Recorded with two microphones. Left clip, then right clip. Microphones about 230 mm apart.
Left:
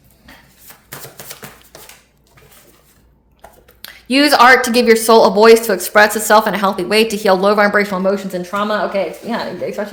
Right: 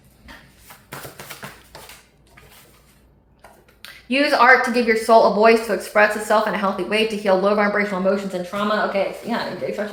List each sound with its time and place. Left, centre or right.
3.8 s a woman's voice: left